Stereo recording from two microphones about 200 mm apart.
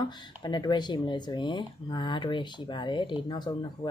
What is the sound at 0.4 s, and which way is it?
Speech, 20° left (ahead or behind).